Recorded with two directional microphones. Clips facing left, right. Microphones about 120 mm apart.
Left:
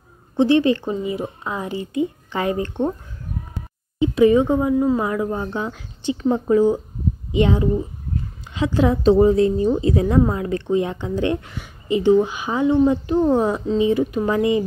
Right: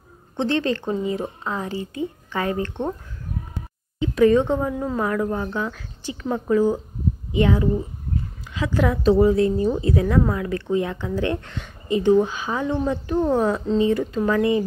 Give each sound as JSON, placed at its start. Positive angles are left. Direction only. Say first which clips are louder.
{"t": 0.4, "sound": "speech", "louder": "left 6 dB", "side_deg": 10}
{"t": 4.0, "sound": "speech", "louder": "left 2 dB", "side_deg": 15}